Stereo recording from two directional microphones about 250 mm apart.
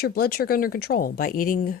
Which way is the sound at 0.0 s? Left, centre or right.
Left.